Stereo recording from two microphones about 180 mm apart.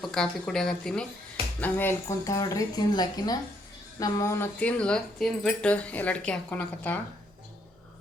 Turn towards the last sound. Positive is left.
turn(degrees=10)  # may be behind; listen again after turning